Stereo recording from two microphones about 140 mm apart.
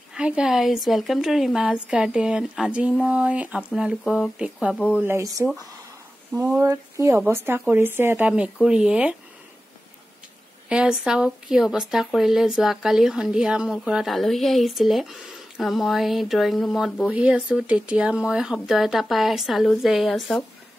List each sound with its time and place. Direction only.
0.1 s speech: 5° right (ahead or behind)
4.7 s speech: 10° left (ahead or behind)
5.0 s speech: 15° right (ahead or behind)
6.3 s speech: 5° right (ahead or behind)
6.6 s speech: 20° right (ahead or behind)
10.7 s speech: 5° right (ahead or behind)